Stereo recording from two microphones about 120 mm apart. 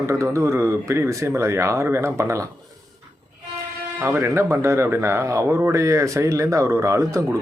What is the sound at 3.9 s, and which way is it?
Speech, 15° right (ahead or behind).